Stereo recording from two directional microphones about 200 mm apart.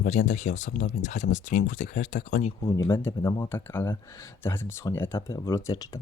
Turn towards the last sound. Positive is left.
turn(degrees=15)  # may be behind; listen again after turning